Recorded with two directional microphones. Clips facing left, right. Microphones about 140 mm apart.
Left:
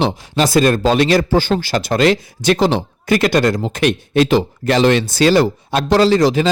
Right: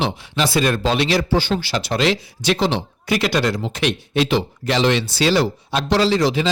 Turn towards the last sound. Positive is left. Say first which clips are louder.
# left 5 dB
turn(degrees=45)  # may be behind; listen again after turning